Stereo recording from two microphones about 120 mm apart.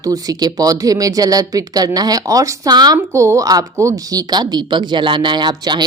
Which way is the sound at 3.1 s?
25° right (ahead or behind).